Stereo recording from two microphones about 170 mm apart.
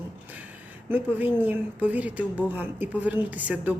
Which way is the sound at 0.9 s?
10° right (ahead or behind).